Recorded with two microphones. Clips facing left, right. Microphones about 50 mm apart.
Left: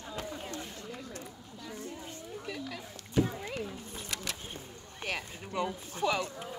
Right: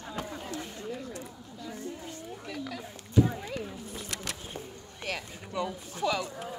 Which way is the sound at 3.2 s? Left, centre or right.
Left.